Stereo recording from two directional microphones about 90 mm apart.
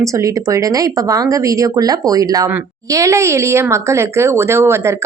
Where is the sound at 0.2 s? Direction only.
35° right (ahead or behind).